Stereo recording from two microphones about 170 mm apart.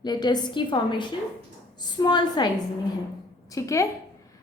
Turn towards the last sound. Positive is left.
turn(degrees=20)  # may be behind; listen again after turning